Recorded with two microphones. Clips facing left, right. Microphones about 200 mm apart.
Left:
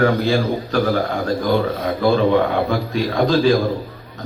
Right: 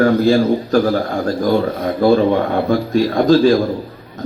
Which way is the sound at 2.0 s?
45° right (ahead or behind).